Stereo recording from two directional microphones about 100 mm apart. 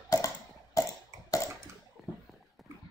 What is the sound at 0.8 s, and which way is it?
Cough, 35° left (ahead or behind).